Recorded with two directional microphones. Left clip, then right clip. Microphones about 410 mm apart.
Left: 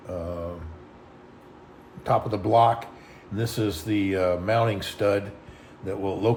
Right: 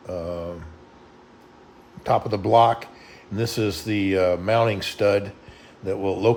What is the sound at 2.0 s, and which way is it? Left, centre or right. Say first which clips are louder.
A man's voice: right 2 dB; centre.